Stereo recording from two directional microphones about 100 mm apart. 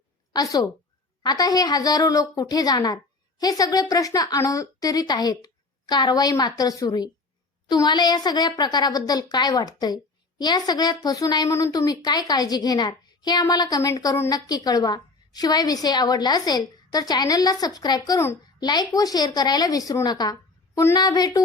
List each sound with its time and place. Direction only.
0.3 s a woman's voice: 40° left (ahead or behind)
11.4 s a woman's voice: 30° left (ahead or behind)
11.7 s a woman's voice: 40° left (ahead or behind)